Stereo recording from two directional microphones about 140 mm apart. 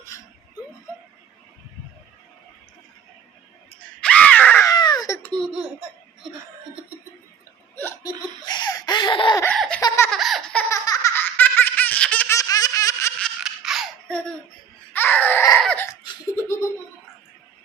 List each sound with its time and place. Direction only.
4.0 s wail: 10° left (ahead or behind)
4.6 s baby cry: 30° left (ahead or behind)
5.2 s laughter: 5° left (ahead or behind)
8.0 s laughter: 30° left (ahead or behind)
9.6 s laughter: 5° left (ahead or behind)
9.8 s laughter: 20° left (ahead or behind)
10.1 s baby laughter: centre (ahead or behind)
10.7 s baby laughter: 25° left (ahead or behind)
11.1 s laughter: 15° left (ahead or behind)
12.4 s baby laughter: 25° left (ahead or behind)
13.4 s a sound: centre (ahead or behind)
14.9 s baby cry: 15° left (ahead or behind)
15.5 s crying: 10° left (ahead or behind)
15.9 s laughter: 20° left (ahead or behind)